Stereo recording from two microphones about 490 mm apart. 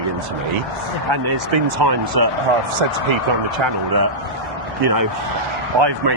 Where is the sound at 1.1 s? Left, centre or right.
Right.